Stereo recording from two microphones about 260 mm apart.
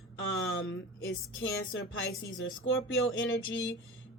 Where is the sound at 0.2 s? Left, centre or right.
Left.